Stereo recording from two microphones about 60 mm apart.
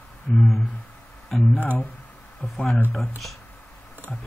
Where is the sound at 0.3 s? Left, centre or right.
Centre.